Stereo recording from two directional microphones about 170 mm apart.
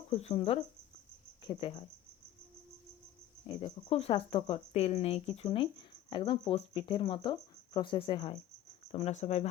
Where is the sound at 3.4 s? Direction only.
30° left (ahead or behind).